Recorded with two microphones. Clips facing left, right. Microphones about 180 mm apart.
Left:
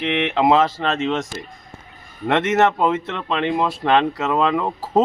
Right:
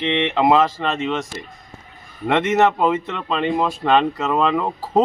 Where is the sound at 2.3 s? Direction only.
15° right (ahead or behind).